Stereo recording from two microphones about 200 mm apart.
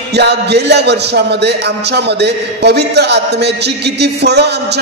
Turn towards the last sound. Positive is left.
turn(degrees=-55)  # may be behind; listen again after turning